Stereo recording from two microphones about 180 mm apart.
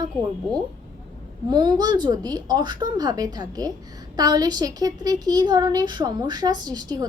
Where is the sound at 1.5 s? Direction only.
25° right (ahead or behind).